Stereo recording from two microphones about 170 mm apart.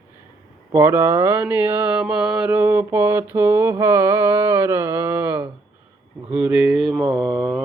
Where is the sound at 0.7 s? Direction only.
15° right (ahead or behind).